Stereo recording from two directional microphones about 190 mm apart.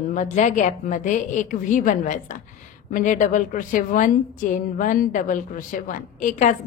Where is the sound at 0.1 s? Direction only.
40° left (ahead or behind).